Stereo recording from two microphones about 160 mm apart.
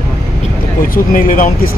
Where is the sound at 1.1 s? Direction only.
55° left (ahead or behind).